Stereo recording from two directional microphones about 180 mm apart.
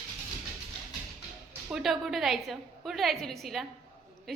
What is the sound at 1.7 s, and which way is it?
A woman's voice, centre (ahead or behind).